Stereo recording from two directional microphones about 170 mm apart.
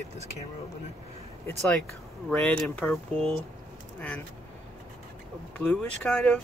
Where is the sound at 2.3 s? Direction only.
5° left (ahead or behind).